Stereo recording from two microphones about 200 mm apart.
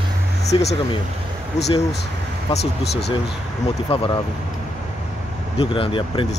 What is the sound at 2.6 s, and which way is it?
Speech, 55° left (ahead or behind).